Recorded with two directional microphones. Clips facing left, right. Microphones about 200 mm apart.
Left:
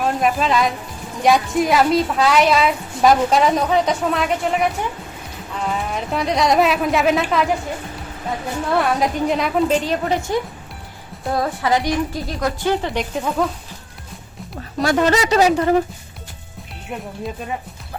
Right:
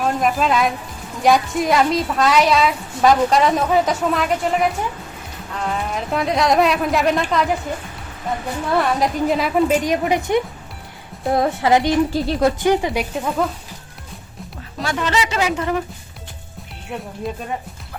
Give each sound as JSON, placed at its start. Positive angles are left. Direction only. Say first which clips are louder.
{"t": 0.0, "sound": "a woman's voice", "louder": "even", "side_deg": 0}
{"t": 8.8, "sound": "a woman's voice", "louder": "even", "side_deg": 0}
{"t": 14.8, "sound": "speech", "louder": "left 5 dB", "side_deg": 45}